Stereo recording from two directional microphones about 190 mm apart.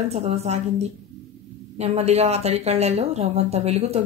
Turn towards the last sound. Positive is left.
turn(degrees=-35)  # may be behind; listen again after turning